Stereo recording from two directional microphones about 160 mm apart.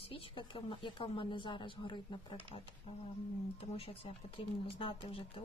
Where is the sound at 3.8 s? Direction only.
35° left (ahead or behind).